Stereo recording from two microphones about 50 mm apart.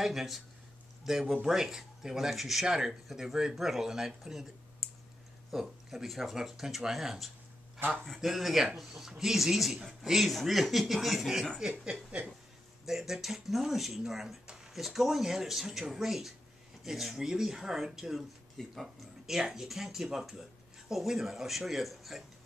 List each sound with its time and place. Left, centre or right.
0.0 s speech: centre
11.5 s speech: right
12.8 s speech: centre